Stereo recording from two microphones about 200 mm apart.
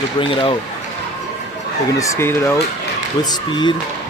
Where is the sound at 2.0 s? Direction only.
15° left (ahead or behind).